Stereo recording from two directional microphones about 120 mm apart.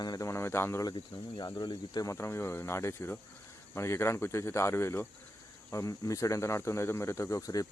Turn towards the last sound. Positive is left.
turn(degrees=30)  # may be behind; listen again after turning